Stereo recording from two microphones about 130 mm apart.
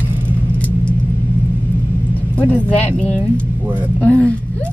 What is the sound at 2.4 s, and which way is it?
A woman's voice, 10° left (ahead or behind).